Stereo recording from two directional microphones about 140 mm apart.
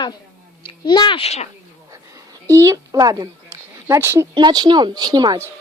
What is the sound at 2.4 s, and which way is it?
Speech, 20° right (ahead or behind).